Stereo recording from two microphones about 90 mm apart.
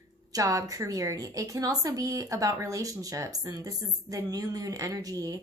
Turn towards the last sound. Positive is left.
turn(degrees=-40)  # may be behind; listen again after turning